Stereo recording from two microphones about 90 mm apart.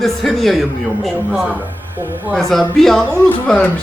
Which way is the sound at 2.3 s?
5° left (ahead or behind).